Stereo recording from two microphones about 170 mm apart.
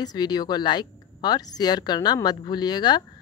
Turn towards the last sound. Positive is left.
turn(degrees=25)  # may be behind; listen again after turning